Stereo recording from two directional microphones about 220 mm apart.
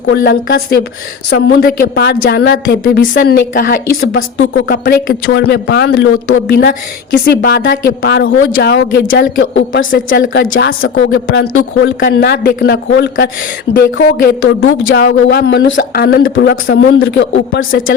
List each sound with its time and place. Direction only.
0.1 s a woman's voice: 50° left (ahead or behind)
11.1 s a woman's voice: 60° left (ahead or behind)
15.9 s a woman's voice: 45° left (ahead or behind)